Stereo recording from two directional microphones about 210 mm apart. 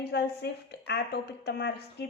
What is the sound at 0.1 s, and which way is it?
A woman's voice, 50° left (ahead or behind).